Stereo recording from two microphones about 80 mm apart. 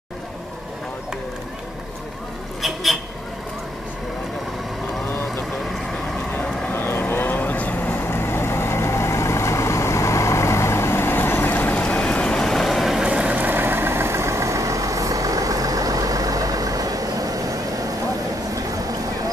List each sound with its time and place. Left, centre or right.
2.6 s vehicle: centre
6.3 s vehicle: left; by 13.0 s centre
13.0 s vehicle: centre; by 17.8 s right
18.5 s a sound: right